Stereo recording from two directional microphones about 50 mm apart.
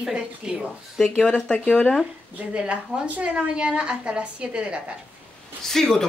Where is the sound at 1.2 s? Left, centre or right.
Left.